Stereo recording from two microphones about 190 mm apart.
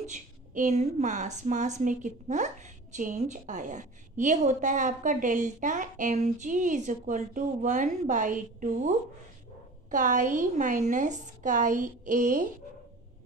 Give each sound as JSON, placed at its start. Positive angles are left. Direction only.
{"t": 0.0, "sound": "a woman's voice", "side_deg": -40}